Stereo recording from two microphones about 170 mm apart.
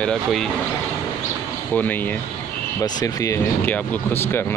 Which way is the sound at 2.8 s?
20° left (ahead or behind).